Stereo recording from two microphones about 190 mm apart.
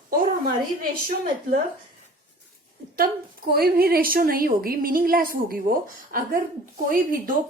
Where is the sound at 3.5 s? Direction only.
55° right (ahead or behind).